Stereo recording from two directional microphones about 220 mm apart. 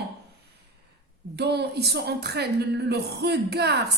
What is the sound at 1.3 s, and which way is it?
Speech, 50° right (ahead or behind).